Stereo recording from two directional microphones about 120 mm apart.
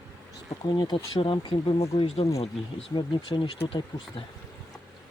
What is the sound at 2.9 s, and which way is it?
Speech, 40° left (ahead or behind).